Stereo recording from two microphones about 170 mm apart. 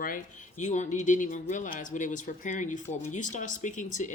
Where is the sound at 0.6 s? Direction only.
45° left (ahead or behind).